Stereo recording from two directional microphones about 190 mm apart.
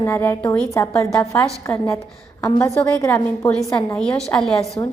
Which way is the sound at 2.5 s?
15° left (ahead or behind).